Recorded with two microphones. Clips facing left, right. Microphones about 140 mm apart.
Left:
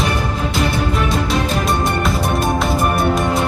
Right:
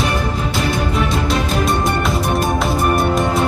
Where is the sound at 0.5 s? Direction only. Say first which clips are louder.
Even; centre (ahead or behind).